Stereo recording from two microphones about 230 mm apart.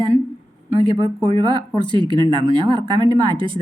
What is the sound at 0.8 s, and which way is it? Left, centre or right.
A woman's voice, centre.